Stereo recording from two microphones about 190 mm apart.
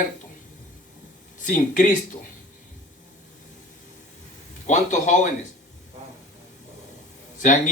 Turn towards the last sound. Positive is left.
turn(degrees=40)  # may be behind; listen again after turning